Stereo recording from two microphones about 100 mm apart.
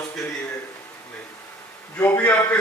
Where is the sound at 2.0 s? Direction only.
20° left (ahead or behind).